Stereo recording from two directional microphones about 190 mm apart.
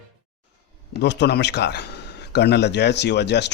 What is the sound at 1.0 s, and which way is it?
Speech, 65° left (ahead or behind).